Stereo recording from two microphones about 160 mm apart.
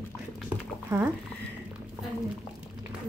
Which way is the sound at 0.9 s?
15° right (ahead or behind).